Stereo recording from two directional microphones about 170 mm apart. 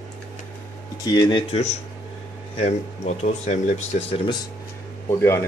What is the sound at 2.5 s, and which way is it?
Speech, 40° left (ahead or behind).